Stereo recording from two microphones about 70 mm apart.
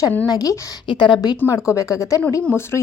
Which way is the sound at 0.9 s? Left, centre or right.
Left.